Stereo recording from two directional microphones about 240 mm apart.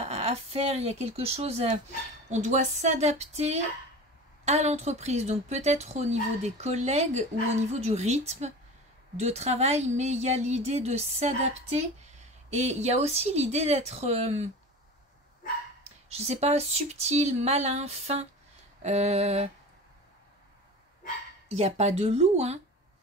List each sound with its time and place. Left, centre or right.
0.0 s a woman's voice: right
15.8 s a woman's voice: right
21.5 s a woman's voice: right